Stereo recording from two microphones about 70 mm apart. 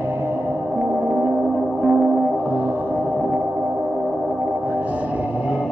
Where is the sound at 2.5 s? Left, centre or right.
Right.